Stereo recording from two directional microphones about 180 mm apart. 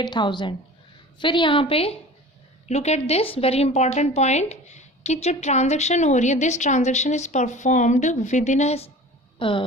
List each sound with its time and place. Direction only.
0.0 s a woman's voice: 25° left (ahead or behind)